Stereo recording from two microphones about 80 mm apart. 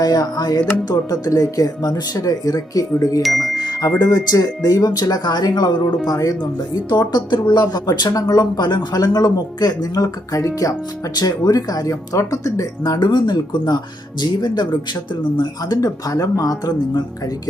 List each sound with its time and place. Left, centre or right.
0.0 s speech: left
3.2 s speech: centre
3.8 s speech: left
6.1 s speech: left
13.0 s speech: left
15.8 s speech: left